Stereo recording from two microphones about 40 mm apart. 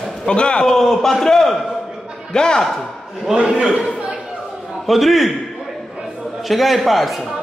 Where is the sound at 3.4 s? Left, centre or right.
Centre.